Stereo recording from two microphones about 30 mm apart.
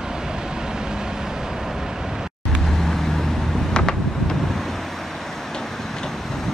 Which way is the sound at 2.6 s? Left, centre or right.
Centre.